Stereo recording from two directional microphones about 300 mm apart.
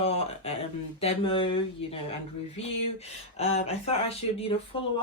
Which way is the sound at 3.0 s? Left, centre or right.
Left.